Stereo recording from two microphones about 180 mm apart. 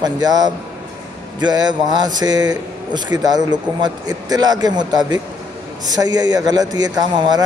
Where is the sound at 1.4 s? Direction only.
25° right (ahead or behind).